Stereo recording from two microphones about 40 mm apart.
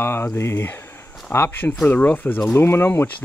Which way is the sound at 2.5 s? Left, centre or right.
Left.